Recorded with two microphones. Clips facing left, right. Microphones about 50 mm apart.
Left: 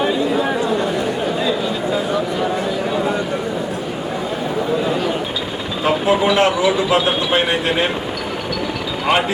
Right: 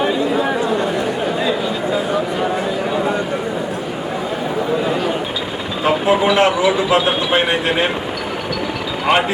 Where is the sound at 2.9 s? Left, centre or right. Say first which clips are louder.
Right 1 dB; right.